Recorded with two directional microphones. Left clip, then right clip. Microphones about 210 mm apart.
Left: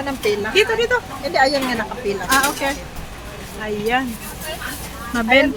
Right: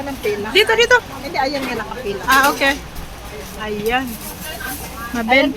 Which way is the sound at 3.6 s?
5° left (ahead or behind).